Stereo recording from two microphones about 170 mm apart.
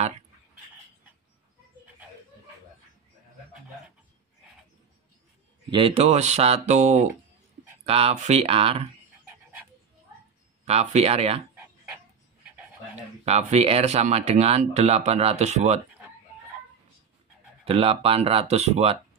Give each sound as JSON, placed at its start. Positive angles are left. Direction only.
{"t": 5.7, "sound": "speech", "side_deg": -30}
{"t": 10.6, "sound": "speech", "side_deg": -40}
{"t": 13.2, "sound": "speech", "side_deg": -40}
{"t": 17.6, "sound": "speech", "side_deg": -35}